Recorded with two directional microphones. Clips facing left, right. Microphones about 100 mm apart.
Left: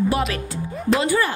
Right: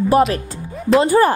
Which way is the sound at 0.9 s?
40° right (ahead or behind).